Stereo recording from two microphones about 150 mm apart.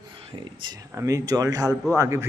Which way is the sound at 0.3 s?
30° right (ahead or behind).